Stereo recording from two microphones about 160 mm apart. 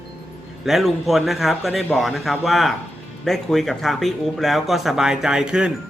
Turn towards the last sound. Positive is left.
turn(degrees=-5)  # may be behind; listen again after turning